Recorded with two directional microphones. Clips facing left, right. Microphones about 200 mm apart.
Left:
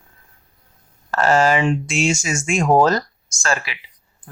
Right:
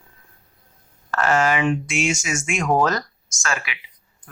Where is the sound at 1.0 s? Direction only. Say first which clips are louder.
Left 3 dB; 30° left (ahead or behind).